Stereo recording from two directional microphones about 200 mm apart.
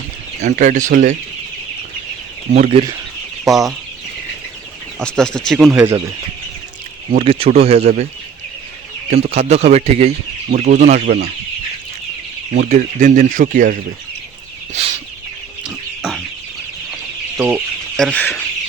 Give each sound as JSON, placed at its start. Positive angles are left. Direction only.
{"t": 0.4, "sound": "speech", "side_deg": -40}
{"t": 2.5, "sound": "speech", "side_deg": -30}
{"t": 3.4, "sound": "speech", "side_deg": 0}
{"t": 4.9, "sound": "speech", "side_deg": 5}
{"t": 7.1, "sound": "speech", "side_deg": -30}
{"t": 9.0, "sound": "speech", "side_deg": -35}
{"t": 12.5, "sound": "speech", "side_deg": -40}
{"t": 14.7, "sound": "chicken", "side_deg": -30}
{"t": 15.6, "sound": "chicken", "side_deg": -5}
{"t": 17.3, "sound": "speech", "side_deg": -10}
{"t": 17.9, "sound": "speech", "side_deg": 5}